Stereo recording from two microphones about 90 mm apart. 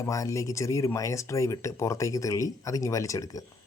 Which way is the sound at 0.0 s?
35° left (ahead or behind).